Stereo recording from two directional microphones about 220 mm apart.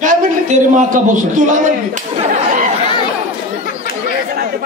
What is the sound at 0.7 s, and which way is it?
Speech, 35° right (ahead or behind).